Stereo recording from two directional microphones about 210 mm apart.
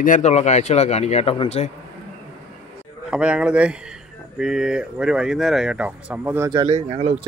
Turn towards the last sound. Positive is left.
turn(degrees=-30)  # may be behind; listen again after turning